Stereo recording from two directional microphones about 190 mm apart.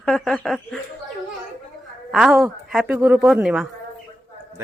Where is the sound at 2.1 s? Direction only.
5° right (ahead or behind).